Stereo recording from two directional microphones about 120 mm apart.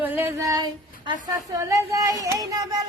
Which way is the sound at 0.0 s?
15° right (ahead or behind).